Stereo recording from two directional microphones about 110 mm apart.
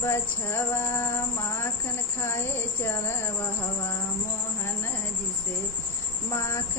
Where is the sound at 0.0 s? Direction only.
25° left (ahead or behind).